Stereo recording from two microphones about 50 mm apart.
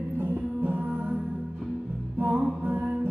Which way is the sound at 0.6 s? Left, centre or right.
Right.